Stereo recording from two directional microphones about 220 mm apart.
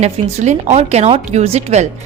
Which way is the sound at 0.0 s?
30° right (ahead or behind).